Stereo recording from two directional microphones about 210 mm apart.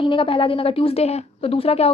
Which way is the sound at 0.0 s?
25° left (ahead or behind).